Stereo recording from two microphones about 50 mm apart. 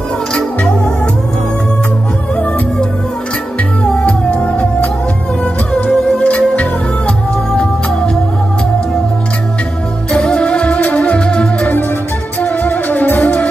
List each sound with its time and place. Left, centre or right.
0.3 s music: centre
3.8 s music: left
6.1 s music: left
10.1 s music: centre
12.4 s music: left